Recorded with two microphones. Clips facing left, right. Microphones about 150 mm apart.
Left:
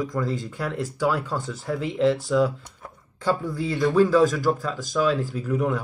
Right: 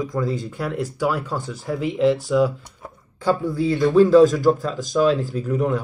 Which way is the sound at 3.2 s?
Centre (ahead or behind).